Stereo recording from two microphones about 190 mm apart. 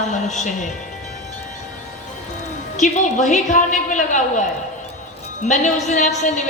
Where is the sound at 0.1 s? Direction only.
40° left (ahead or behind).